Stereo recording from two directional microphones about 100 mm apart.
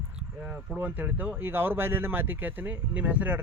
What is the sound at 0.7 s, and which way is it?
Speech, 20° right (ahead or behind).